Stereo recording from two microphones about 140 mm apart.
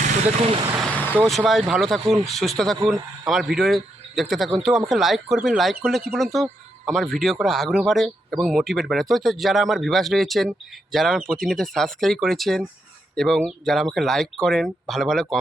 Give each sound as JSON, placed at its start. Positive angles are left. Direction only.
{"t": 0.0, "sound": "vehicle", "side_deg": -45}
{"t": 0.8, "sound": "vehicle", "side_deg": 10}
{"t": 1.2, "sound": "speech", "side_deg": 0}